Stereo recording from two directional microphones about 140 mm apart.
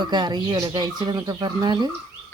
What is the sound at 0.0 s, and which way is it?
Speech, 30° right (ahead or behind).